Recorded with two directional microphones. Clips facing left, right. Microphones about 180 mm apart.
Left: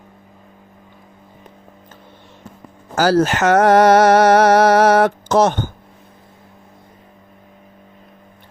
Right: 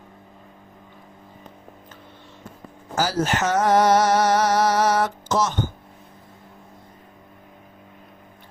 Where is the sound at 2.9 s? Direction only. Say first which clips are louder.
Left 8 dB; 75° left (ahead or behind).